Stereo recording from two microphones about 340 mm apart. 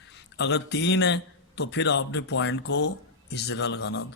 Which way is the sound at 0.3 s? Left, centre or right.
Left.